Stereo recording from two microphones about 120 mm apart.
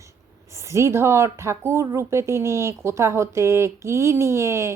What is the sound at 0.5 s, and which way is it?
Speech, 25° right (ahead or behind).